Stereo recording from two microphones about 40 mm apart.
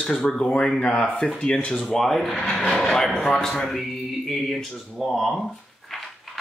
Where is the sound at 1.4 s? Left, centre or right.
Left.